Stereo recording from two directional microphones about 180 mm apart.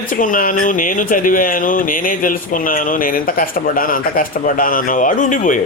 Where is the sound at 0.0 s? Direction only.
50° left (ahead or behind).